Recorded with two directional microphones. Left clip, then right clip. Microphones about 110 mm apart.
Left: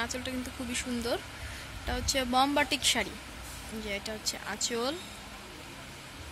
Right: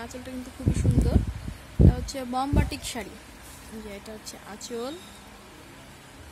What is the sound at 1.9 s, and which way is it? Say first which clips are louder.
Speech: left 2 dB; 10° right (ahead or behind).